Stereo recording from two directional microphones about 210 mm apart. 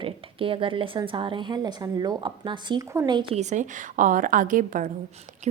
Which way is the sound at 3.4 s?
35° right (ahead or behind).